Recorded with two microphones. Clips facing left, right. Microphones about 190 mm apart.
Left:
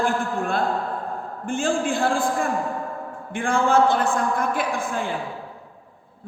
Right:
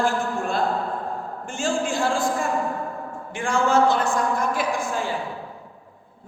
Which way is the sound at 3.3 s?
55° left (ahead or behind).